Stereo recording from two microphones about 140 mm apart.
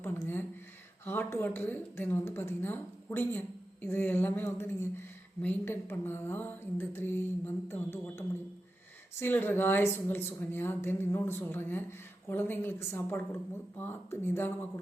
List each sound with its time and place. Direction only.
0.0 s a sound: 15° left (ahead or behind)
1.0 s a woman's voice: 15° left (ahead or behind)
9.2 s a woman's voice: 15° left (ahead or behind)